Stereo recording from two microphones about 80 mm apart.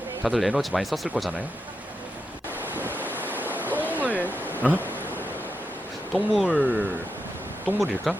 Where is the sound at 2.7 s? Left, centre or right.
Right.